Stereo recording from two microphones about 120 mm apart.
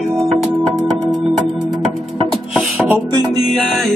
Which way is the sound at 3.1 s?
35° right (ahead or behind).